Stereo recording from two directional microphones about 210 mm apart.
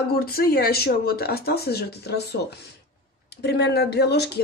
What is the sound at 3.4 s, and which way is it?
Speech, 50° left (ahead or behind).